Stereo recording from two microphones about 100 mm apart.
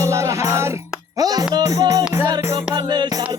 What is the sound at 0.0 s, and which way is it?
Music, 30° right (ahead or behind).